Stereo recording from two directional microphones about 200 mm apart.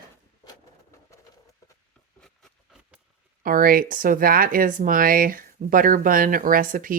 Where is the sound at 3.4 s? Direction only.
45° right (ahead or behind).